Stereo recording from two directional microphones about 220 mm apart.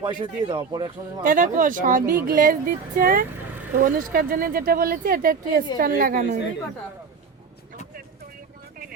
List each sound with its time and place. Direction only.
0.0 s a man's voice: 20° right (ahead or behind)
1.2 s speech: 40° right (ahead or behind)